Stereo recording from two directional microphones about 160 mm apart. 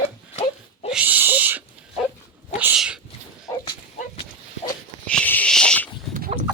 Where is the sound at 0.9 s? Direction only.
10° right (ahead or behind).